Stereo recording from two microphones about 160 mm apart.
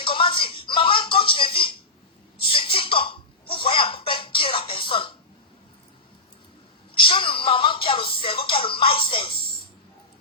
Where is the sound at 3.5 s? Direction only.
30° left (ahead or behind).